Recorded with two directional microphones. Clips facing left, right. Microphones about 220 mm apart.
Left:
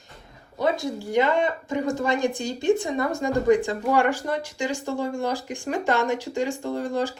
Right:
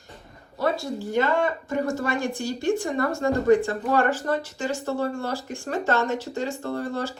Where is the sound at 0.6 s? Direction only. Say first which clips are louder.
Left 1 dB; 15° left (ahead or behind).